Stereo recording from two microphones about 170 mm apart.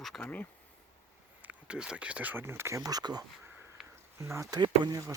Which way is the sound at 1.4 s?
5° right (ahead or behind).